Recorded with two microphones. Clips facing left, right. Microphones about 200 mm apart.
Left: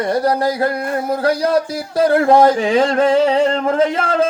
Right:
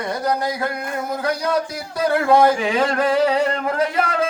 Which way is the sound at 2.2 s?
30° left (ahead or behind).